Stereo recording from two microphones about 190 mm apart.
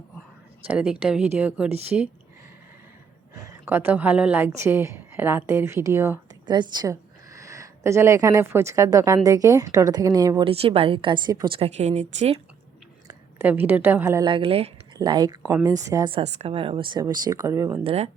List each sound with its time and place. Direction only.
0.7 s speech: 5° right (ahead or behind)
3.3 s a woman's voice: 15° right (ahead or behind); by 12.4 s 35° right (ahead or behind)
13.1 s a woman's voice: 10° right (ahead or behind)
14.3 s speech: 25° right (ahead or behind)
16.1 s speech: 35° right (ahead or behind); by 17.7 s 15° right (ahead or behind)
17.8 s speech: 35° right (ahead or behind)